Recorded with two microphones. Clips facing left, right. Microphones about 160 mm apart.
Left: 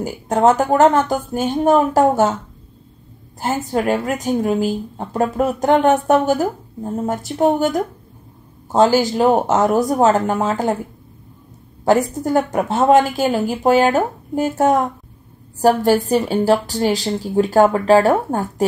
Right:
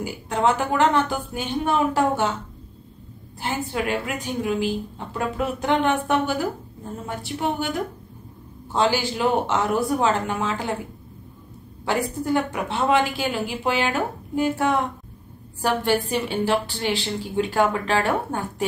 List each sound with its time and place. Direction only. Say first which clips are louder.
0.0 s a woman's voice: left 7 dB; 45° left (ahead or behind)
3.3 s a woman's voice: left 6 dB; 45° left (ahead or behind)
11.8 s a woman's voice: left 8 dB; 45° left (ahead or behind)